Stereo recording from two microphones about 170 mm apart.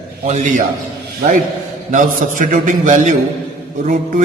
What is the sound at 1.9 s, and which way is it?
A man's voice, 50° right (ahead or behind).